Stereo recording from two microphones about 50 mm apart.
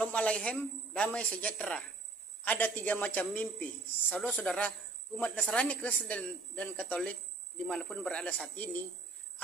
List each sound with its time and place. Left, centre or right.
0.0 s a man's voice: left
2.4 s a man's voice: left
4.6 s a sound: left
5.2 s a man's voice: centre
7.1 s cricket: left
7.9 s a man's voice: left